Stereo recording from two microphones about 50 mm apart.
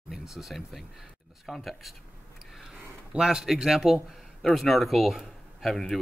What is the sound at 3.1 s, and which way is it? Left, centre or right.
Speech, centre.